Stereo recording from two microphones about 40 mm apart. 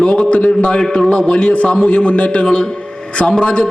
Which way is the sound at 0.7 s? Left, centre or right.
Centre.